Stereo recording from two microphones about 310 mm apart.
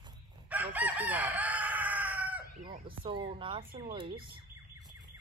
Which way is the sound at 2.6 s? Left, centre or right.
Centre.